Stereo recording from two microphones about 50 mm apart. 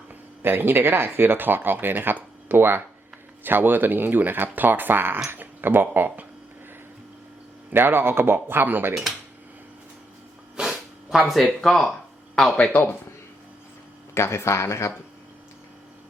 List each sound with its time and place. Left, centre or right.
0.1 s speech: right
7.7 s speech: right
10.6 s snort: centre
12.4 s speech: centre
14.1 s speech: left